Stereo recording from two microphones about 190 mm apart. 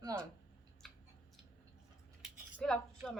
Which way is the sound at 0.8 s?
Centre (ahead or behind).